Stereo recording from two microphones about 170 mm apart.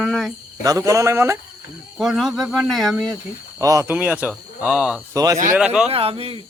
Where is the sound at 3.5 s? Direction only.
20° right (ahead or behind).